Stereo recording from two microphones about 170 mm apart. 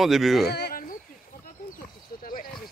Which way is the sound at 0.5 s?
65° left (ahead or behind).